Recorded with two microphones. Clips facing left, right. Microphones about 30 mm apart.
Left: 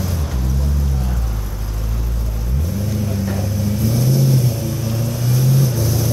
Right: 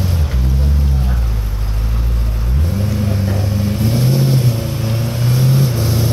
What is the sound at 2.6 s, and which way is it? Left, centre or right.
Vehicle, right.